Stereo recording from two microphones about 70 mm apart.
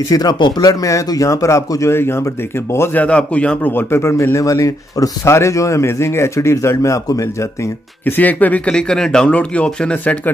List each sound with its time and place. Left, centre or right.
0.1 s speech: left
0.8 s speech: left
2.9 s a man's voice: centre
3.7 s speech: left
8.0 s speech: left